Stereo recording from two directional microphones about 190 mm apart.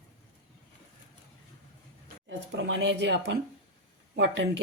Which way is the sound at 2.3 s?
70° right (ahead or behind).